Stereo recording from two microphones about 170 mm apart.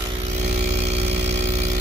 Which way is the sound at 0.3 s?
40° right (ahead or behind).